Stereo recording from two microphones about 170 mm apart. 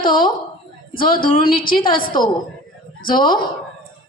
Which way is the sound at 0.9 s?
55° left (ahead or behind).